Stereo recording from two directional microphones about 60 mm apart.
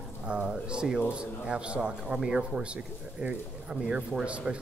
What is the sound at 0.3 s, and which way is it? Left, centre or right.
Speech, centre.